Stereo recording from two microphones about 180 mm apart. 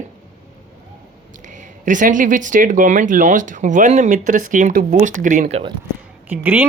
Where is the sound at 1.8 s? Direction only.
45° right (ahead or behind).